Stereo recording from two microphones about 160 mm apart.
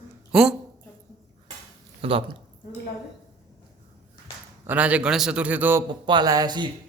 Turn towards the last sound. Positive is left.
turn(degrees=-25)  # may be behind; listen again after turning